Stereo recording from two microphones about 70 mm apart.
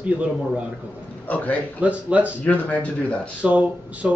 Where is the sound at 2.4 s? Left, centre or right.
Left.